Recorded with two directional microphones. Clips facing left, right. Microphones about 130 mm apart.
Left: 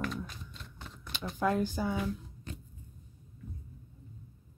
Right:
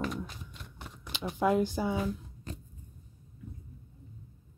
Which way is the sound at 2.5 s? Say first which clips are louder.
Right 2 dB; 40° right (ahead or behind).